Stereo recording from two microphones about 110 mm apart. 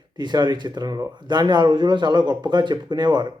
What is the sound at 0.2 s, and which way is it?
Speech, 40° right (ahead or behind).